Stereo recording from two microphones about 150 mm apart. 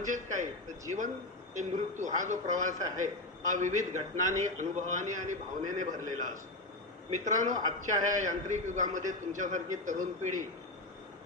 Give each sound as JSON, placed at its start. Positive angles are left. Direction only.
{"t": 0.0, "sound": "a man's voice", "side_deg": -55}